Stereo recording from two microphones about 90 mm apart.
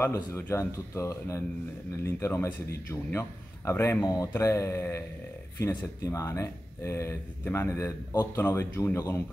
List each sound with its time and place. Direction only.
0.1 s a man's voice: 30° left (ahead or behind)